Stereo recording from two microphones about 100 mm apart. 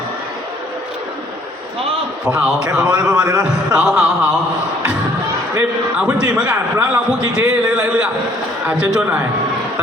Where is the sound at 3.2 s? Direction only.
35° right (ahead or behind).